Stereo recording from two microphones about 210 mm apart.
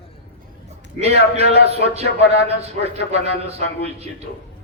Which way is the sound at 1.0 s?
30° right (ahead or behind).